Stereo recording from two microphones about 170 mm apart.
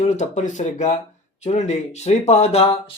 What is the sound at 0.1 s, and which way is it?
Speech, 45° left (ahead or behind).